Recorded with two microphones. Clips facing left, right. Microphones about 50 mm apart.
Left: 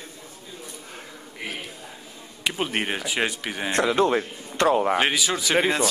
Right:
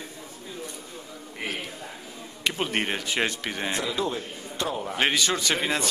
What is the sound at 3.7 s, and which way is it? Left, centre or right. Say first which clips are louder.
Speech: left 11 dB; left.